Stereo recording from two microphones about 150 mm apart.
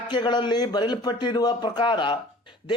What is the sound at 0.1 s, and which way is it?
Speech, 30° left (ahead or behind).